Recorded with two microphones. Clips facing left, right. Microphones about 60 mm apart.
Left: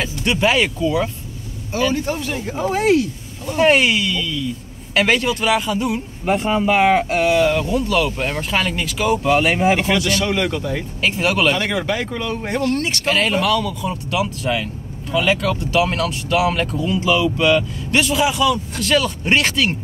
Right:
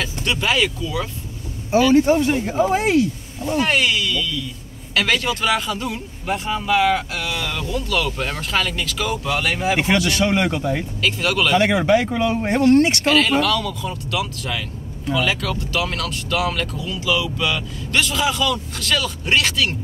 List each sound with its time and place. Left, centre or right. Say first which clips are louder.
0.0 s speech: left 4 dB; centre
2.0 s speech: right 6 dB; right
3.5 s speech: left 5 dB; left
6.2 s speech: left 5 dB; left
7.5 s speech: left 5 dB; left
10.2 s speech: right 1 dB; centre
11.0 s speech: left 4 dB; left
11.5 s speech: right 5 dB; centre
12.4 s speech: right 6 dB; right
13.1 s speech: left 3 dB; centre
14.1 s speech: left 5 dB; left
16.8 s speech: left 6 dB; left
17.9 s speech: left 3 dB; centre